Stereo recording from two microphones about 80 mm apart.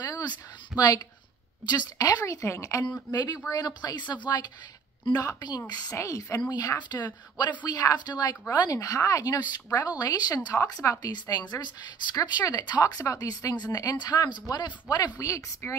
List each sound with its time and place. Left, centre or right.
0.0 s a sound: left
2.0 s a woman's voice: left
3.1 s a woman's voice: left
5.1 s speech: left
5.9 s a woman's voice: left
6.8 s a woman's voice: left
15.1 s a woman's voice: left